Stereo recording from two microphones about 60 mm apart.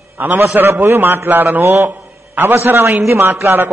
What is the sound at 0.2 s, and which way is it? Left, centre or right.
A man's voice, right.